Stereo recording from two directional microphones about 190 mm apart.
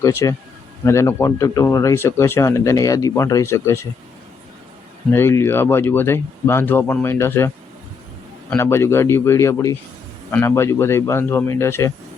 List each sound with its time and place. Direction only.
0.0 s speech: 15° left (ahead or behind)
5.1 s speech: 10° left (ahead or behind)